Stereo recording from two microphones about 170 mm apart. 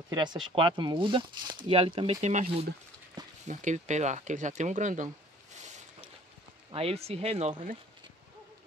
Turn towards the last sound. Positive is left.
turn(degrees=-35)  # may be behind; listen again after turning